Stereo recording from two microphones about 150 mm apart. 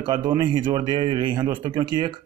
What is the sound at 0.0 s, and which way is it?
A man's voice, 30° right (ahead or behind).